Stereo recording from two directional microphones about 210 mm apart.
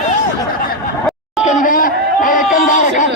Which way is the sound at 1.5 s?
40° left (ahead or behind).